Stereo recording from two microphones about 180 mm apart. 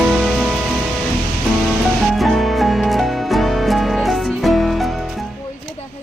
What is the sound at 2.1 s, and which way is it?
Music, centre (ahead or behind).